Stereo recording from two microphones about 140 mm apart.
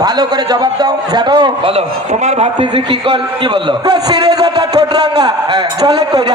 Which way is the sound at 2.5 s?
35° right (ahead or behind).